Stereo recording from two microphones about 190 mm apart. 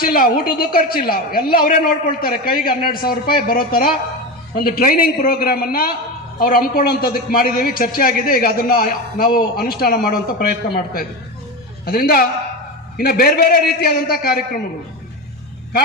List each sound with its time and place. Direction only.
0.0 s a man's voice: 50° left (ahead or behind)